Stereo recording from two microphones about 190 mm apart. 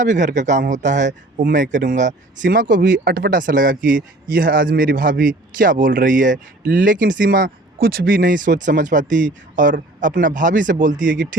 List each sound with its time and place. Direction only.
0.0 s speech: 40° right (ahead or behind)